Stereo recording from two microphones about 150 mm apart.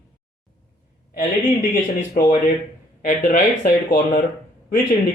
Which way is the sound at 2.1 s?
75° left (ahead or behind).